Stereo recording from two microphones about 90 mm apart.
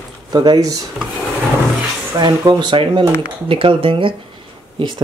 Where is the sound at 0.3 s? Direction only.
50° right (ahead or behind).